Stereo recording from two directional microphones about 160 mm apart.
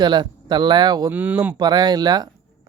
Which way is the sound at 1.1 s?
10° right (ahead or behind).